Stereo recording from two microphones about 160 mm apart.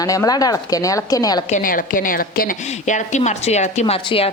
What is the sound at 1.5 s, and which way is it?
A woman's voice, 55° left (ahead or behind).